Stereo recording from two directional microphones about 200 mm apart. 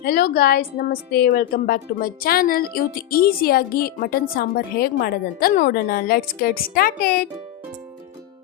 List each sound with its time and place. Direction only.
0.0 s a woman's voice: 50° left (ahead or behind)